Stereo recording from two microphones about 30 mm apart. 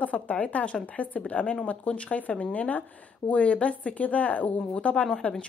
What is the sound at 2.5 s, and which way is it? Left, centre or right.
Speech, left.